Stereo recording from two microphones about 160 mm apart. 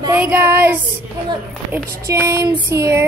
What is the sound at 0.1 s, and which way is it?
Child singing, 10° right (ahead or behind).